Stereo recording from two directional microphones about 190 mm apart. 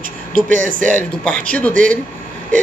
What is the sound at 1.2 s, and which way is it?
Speech, 5° left (ahead or behind).